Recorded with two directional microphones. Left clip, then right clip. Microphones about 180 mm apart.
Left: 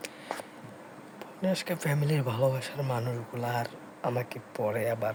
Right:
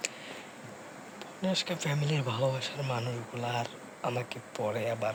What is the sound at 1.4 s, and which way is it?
Speech, 30° left (ahead or behind).